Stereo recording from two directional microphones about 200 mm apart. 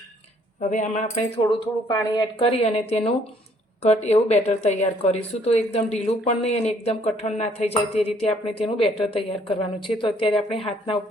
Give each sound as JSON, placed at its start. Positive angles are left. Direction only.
{"t": 0.7, "sound": "speech", "side_deg": 35}
{"t": 1.5, "sound": "speech", "side_deg": 25}